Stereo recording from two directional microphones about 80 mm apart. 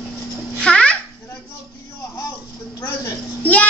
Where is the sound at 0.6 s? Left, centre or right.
Centre.